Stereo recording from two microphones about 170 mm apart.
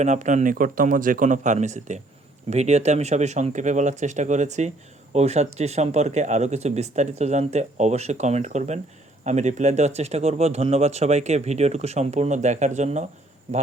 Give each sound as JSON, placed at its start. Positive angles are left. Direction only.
{"t": 0.0, "sound": "speech", "side_deg": -45}